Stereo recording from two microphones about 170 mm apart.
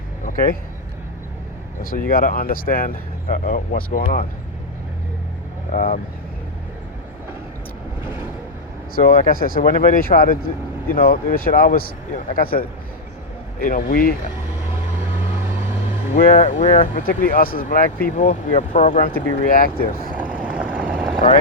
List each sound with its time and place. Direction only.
0.3 s a sound: 55° left (ahead or behind)
1.8 s speech: 55° left (ahead or behind)
5.7 s speech: 50° left (ahead or behind)
9.0 s speech: 60° left (ahead or behind)
16.1 s speech: 45° left (ahead or behind)
19.0 s speech: 55° left (ahead or behind)
20.1 s vehicle: 10° right (ahead or behind)